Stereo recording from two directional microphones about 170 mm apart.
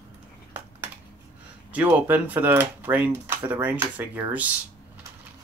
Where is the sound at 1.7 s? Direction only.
10° right (ahead or behind).